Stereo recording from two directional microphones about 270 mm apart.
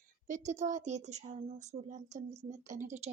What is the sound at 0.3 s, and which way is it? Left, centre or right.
A woman's voice, right.